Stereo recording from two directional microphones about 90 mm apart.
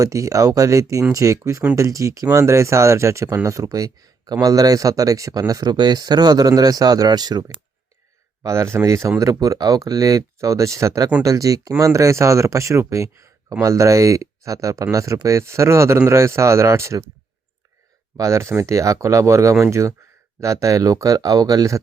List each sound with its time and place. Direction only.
0.0 s speech: 35° right (ahead or behind)
8.4 s speech: 30° right (ahead or behind)
18.2 s speech: 35° right (ahead or behind)